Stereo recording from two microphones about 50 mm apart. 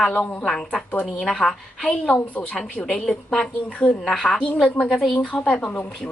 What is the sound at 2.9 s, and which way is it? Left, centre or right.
A woman's voice, centre.